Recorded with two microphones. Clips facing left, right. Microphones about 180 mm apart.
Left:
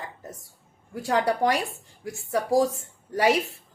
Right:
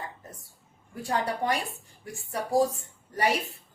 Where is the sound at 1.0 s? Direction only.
90° left.